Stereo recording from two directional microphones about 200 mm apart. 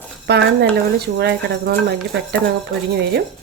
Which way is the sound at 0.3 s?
55° right (ahead or behind).